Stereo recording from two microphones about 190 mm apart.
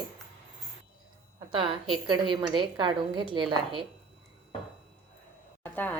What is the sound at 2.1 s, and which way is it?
A woman's voice, 25° right (ahead or behind).